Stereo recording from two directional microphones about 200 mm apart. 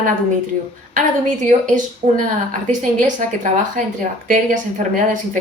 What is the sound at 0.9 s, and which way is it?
A woman's voice, 35° right (ahead or behind).